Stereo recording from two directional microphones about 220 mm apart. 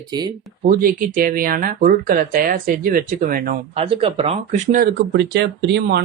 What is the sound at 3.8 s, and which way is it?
Speech, 25° right (ahead or behind).